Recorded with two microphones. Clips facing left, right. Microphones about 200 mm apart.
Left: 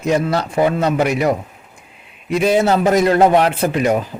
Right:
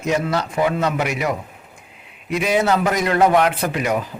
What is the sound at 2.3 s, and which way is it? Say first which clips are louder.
Speech: left 4 dB; 30° left (ahead or behind).